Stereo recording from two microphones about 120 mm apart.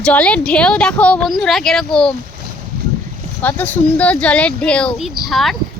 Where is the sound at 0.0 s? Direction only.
10° left (ahead or behind).